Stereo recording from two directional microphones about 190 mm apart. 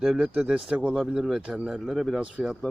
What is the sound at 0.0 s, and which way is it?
A man's voice, 5° right (ahead or behind).